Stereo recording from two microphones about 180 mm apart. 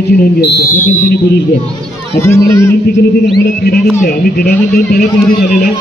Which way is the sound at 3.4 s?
65° left (ahead or behind).